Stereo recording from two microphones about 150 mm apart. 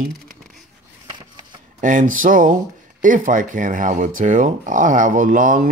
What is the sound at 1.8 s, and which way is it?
Speech, 60° right (ahead or behind).